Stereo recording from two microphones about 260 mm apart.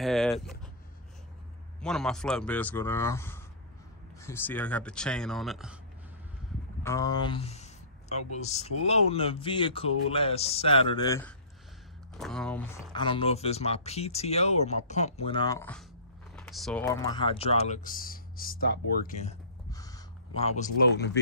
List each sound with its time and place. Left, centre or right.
0.0 s speech: centre
1.8 s speech: centre
6.8 s speech: centre
12.9 s speech: centre
16.3 s a sound: centre
16.8 s speech: centre; by 19.3 s left
19.7 s a sound: centre